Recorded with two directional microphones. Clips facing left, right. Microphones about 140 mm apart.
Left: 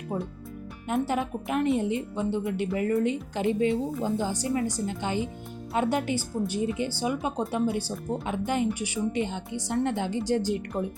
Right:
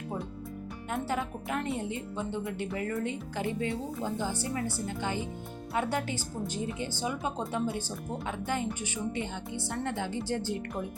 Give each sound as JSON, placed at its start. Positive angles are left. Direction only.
{"t": 0.9, "sound": "speech", "side_deg": 20}